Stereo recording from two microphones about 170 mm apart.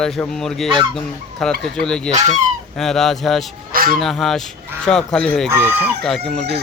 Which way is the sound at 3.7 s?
60° right (ahead or behind).